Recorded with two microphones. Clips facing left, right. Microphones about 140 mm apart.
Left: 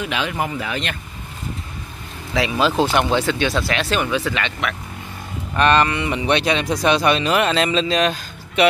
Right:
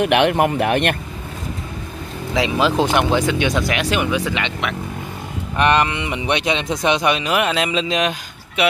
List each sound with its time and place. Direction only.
0.0 s speech: 65° right (ahead or behind)
2.3 s speech: 15° right (ahead or behind)